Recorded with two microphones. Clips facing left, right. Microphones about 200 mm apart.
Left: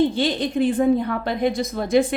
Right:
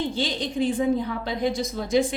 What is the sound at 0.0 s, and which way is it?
A woman's voice, 55° left (ahead or behind).